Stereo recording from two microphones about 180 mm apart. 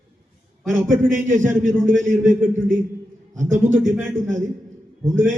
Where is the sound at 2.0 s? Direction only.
45° right (ahead or behind).